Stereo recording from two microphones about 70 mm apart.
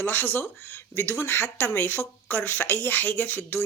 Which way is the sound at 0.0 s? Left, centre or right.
Left.